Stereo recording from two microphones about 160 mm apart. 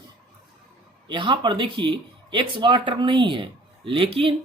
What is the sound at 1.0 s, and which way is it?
Speech, 30° right (ahead or behind).